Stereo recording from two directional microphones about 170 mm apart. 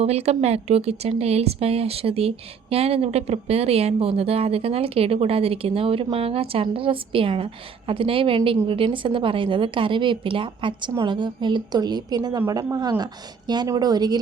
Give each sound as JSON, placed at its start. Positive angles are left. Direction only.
{"t": 0.0, "sound": "a woman's voice", "side_deg": -40}